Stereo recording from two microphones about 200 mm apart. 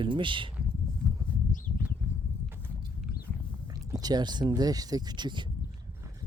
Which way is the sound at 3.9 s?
20° right (ahead or behind).